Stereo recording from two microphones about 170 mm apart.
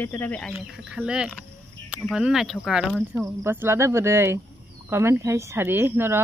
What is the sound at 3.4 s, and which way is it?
Speech, 15° right (ahead or behind).